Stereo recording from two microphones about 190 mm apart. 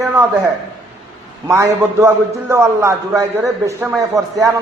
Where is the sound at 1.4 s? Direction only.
15° right (ahead or behind).